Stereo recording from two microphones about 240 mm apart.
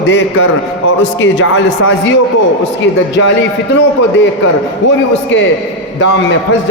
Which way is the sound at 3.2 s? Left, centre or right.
Left.